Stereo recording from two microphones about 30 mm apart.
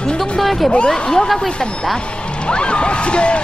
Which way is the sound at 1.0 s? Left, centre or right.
Left.